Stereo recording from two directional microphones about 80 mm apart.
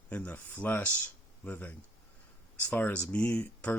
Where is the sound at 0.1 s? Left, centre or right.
Centre.